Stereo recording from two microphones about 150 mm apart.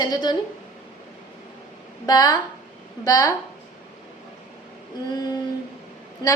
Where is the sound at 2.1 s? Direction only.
30° left (ahead or behind).